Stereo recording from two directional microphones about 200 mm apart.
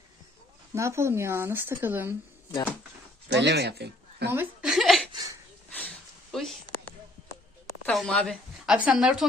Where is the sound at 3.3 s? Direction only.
55° right (ahead or behind).